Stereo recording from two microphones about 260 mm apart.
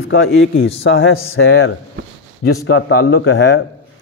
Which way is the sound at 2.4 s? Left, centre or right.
Left.